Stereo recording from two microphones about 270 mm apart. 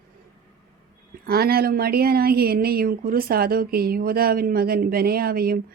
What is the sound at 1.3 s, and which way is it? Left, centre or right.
Speech, right.